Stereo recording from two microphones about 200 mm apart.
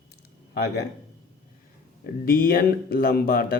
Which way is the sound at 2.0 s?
45° left (ahead or behind).